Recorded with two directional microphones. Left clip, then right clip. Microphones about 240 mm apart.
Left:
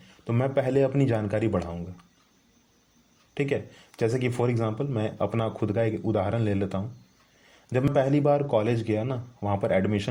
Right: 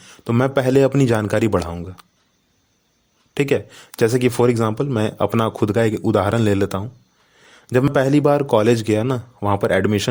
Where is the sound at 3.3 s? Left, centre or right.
Right.